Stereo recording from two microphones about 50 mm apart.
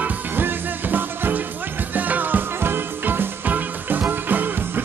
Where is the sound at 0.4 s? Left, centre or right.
Right.